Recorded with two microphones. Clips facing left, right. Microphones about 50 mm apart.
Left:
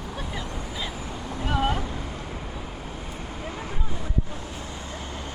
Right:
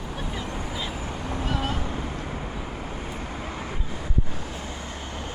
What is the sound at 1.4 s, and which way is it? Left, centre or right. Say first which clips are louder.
Boat: left 5 dB; centre.